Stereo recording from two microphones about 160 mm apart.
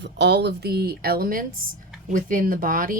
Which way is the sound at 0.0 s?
90° right.